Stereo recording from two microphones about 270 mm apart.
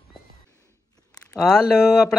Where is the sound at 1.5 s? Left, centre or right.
Centre.